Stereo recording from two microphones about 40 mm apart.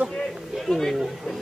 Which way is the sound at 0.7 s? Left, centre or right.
Centre.